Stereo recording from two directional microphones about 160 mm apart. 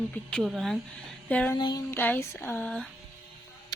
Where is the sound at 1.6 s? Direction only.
25° left (ahead or behind).